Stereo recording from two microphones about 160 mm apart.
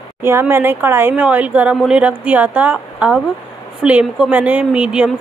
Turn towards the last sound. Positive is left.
turn(degrees=-5)  # may be behind; listen again after turning